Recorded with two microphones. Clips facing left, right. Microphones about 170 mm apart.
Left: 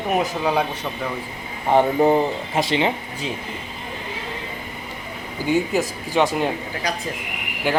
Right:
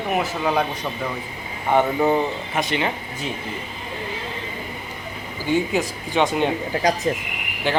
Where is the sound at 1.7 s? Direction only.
30° left (ahead or behind).